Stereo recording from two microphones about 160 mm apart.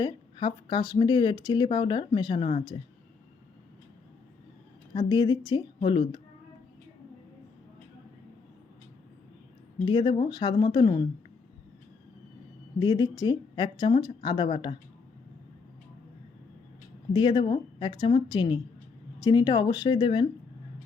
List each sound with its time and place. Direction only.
0.0 s speech: 30° left (ahead or behind)
4.9 s speech: 25° left (ahead or behind)
9.8 s speech: 30° left (ahead or behind)
12.8 s speech: 25° left (ahead or behind)
17.2 s a woman's voice: 30° left (ahead or behind)